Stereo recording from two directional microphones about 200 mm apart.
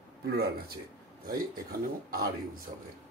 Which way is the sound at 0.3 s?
50° right (ahead or behind).